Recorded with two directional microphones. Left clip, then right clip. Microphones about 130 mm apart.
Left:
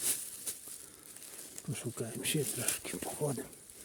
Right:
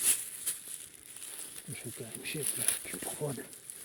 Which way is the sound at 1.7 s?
55° left (ahead or behind).